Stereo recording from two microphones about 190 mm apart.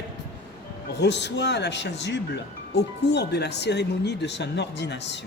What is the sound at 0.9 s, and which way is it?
Speech, 65° left (ahead or behind).